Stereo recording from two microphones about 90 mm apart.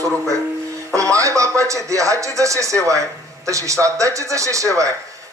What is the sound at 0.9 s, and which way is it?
A man's voice, 35° right (ahead or behind).